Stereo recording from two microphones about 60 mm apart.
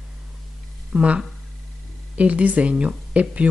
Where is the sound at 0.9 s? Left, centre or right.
Right.